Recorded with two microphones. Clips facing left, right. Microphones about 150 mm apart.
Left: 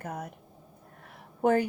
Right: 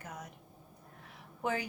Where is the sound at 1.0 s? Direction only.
50° left (ahead or behind).